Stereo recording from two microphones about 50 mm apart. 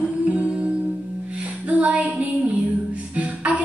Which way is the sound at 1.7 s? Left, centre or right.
Right.